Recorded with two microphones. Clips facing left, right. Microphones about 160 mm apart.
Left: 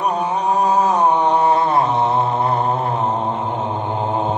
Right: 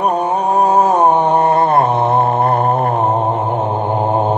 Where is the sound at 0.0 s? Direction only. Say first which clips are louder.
Right 4 dB; 50° right (ahead or behind).